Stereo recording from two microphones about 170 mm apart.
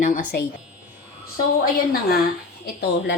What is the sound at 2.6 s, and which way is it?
Speech, 70° left (ahead or behind).